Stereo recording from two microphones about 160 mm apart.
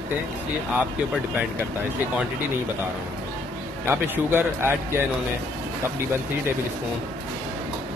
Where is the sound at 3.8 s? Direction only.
15° right (ahead or behind).